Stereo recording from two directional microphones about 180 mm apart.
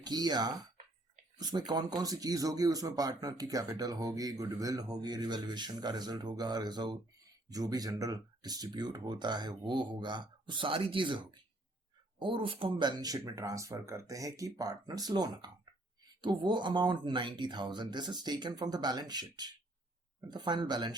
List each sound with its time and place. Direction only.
0.0 s speech: 20° right (ahead or behind)